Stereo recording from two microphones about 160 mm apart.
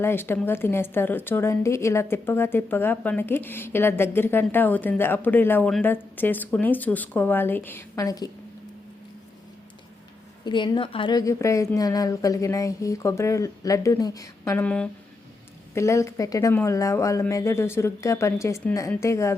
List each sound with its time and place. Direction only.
0.0 s a woman's voice: 15° left (ahead or behind)
10.4 s a woman's voice: 30° left (ahead or behind)